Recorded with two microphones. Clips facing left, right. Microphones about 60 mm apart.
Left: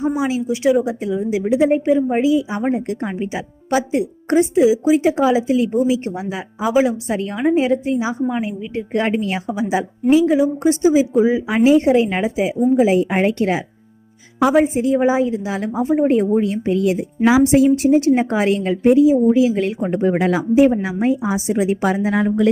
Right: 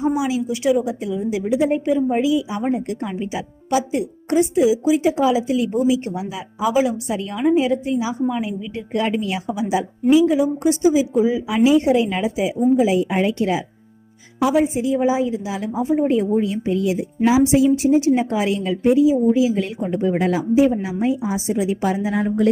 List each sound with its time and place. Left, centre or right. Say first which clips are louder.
0.2 s a woman's voice: left 2 dB; left
11.4 s a woman's voice: left 2 dB; left
16.3 s a woman's voice: left 2 dB; left
20.6 s a woman's voice: left 3 dB; left